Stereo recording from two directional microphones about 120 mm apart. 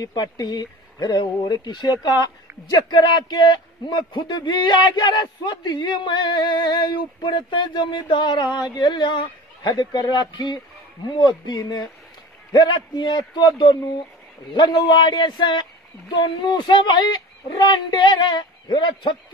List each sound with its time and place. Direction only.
0.0 s speech: 35° left (ahead or behind)